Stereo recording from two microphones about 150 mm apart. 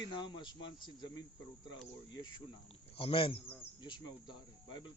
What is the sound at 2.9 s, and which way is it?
Speech, 35° left (ahead or behind).